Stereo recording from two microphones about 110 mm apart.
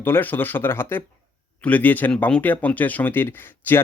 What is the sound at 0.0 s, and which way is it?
Speech, 20° left (ahead or behind).